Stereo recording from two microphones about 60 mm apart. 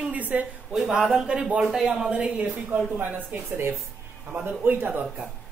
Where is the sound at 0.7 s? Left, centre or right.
Centre; by 5.0 s right.